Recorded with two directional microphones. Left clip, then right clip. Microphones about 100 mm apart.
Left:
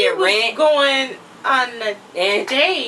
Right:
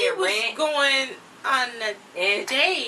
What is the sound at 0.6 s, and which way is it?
A woman's voice, 20° right (ahead or behind).